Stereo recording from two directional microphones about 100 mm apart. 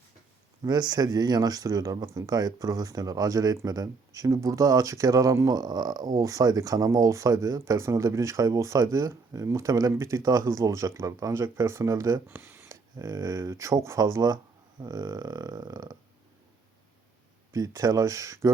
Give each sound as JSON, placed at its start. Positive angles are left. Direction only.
{"t": 0.6, "sound": "speech", "side_deg": -45}
{"t": 13.0, "sound": "speech", "side_deg": -40}
{"t": 17.5, "sound": "speech", "side_deg": -40}